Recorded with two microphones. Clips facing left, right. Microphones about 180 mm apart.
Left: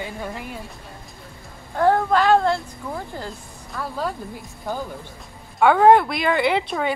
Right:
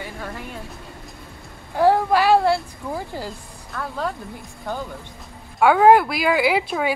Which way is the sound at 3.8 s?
5° left (ahead or behind).